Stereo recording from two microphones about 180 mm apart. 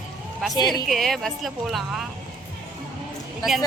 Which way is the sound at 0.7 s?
Centre (ahead or behind).